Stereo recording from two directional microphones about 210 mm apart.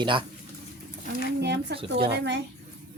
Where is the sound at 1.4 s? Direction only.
55° right (ahead or behind).